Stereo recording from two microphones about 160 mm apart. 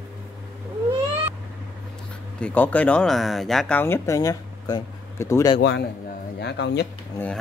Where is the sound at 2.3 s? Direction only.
10° left (ahead or behind).